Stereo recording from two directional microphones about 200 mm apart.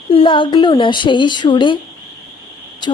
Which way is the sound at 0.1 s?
25° left (ahead or behind).